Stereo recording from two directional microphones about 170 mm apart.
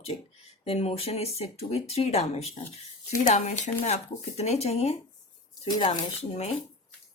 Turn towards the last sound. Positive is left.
turn(degrees=40)  # may be behind; listen again after turning